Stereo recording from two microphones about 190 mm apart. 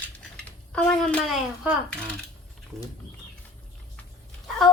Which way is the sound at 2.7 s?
15° right (ahead or behind).